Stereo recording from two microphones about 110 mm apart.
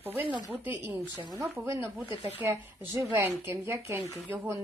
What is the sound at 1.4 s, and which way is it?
Speech, 25° right (ahead or behind).